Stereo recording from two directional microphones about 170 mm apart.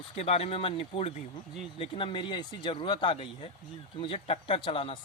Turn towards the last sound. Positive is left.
turn(degrees=30)  # may be behind; listen again after turning